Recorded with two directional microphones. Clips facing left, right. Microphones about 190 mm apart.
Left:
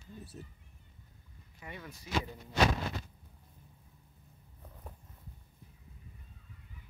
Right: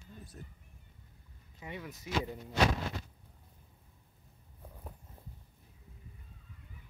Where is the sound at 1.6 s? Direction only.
20° right (ahead or behind).